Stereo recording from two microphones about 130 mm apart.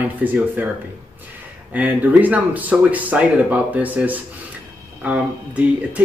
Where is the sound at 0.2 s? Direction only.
15° right (ahead or behind).